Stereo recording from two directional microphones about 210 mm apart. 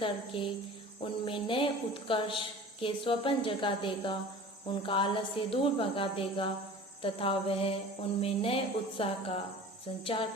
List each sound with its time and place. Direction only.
0.0 s a woman's voice: 25° left (ahead or behind)